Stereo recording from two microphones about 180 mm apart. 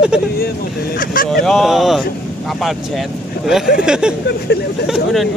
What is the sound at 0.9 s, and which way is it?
Speech, 50° left (ahead or behind).